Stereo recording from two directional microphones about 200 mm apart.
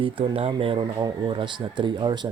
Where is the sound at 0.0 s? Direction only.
25° right (ahead or behind).